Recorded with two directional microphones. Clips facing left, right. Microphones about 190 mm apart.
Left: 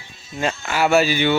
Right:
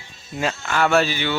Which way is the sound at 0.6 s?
5° left (ahead or behind).